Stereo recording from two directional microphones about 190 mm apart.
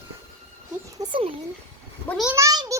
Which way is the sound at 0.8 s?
20° right (ahead or behind).